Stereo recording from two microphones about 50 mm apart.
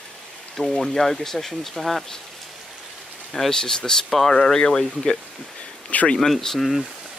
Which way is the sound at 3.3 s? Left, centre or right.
Centre.